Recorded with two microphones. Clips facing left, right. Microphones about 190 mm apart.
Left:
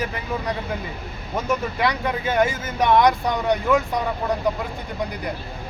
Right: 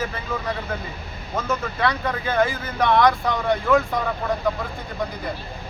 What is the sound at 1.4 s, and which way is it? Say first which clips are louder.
Speech: left 1 dB; 15° left (ahead or behind).